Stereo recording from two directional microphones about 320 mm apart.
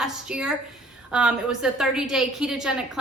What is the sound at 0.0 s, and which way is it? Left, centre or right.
A woman's voice, centre.